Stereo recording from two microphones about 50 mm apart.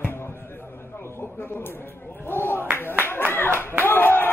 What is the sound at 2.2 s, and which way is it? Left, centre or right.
Clapping, left.